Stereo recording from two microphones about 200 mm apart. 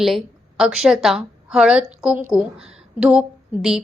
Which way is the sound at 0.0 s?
Centre (ahead or behind).